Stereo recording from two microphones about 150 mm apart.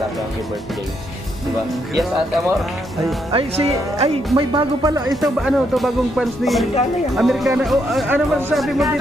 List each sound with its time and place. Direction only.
2.0 s music: centre (ahead or behind)
3.3 s speech: 40° right (ahead or behind)
4.4 s speech: 30° right (ahead or behind)
5.1 s music: centre (ahead or behind)
8.0 s speech: 15° right (ahead or behind)
8.5 s music: centre (ahead or behind)